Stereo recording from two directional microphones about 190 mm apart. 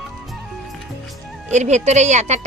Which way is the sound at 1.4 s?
35° right (ahead or behind).